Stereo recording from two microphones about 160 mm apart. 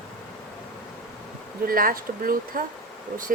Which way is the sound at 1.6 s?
65° right (ahead or behind).